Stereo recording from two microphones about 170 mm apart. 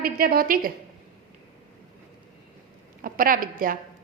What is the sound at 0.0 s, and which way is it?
Speech, 60° right (ahead or behind).